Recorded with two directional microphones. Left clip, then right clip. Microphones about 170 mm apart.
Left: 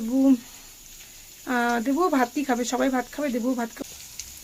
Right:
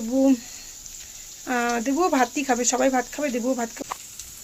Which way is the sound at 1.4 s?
15° left (ahead or behind).